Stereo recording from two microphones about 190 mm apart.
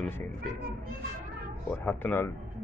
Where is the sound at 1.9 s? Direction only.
10° left (ahead or behind).